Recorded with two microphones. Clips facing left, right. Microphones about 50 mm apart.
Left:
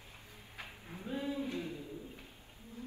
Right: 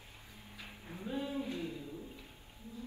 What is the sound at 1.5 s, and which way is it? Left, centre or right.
Music, left.